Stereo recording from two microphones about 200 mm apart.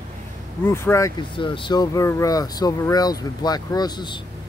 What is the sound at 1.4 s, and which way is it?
Speech, 25° left (ahead or behind).